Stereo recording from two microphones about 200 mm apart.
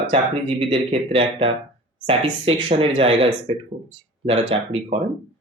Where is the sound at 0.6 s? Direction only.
30° right (ahead or behind).